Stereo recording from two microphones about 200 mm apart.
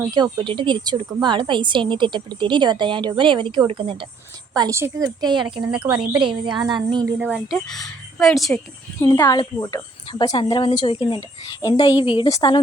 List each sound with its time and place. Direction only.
0.1 s a woman's voice: 20° right (ahead or behind)
4.5 s a woman's voice: 15° right (ahead or behind)
7.2 s speech: 5° right (ahead or behind)
9.0 s a woman's voice: 15° left (ahead or behind)